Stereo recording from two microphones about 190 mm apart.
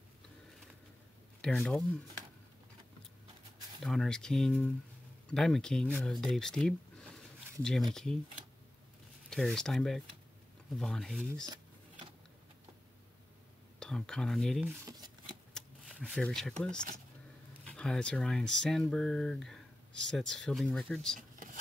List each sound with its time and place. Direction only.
1.4 s speech: 5° left (ahead or behind)
3.8 s speech: 5° left (ahead or behind)
9.3 s speech: centre (ahead or behind)
11.4 s a sound: 20° right (ahead or behind)
13.7 s speech: 5° left (ahead or behind)
15.5 s a sound: 5° left (ahead or behind)
17.6 s speech: 5° left (ahead or behind)